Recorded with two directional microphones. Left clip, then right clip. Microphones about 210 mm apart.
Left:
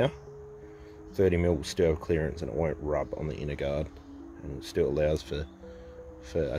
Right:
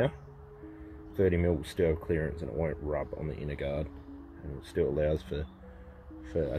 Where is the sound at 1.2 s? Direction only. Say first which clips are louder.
Left 2 dB; 10° left (ahead or behind).